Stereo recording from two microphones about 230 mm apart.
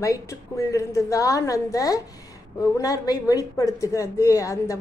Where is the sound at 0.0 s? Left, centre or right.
Centre.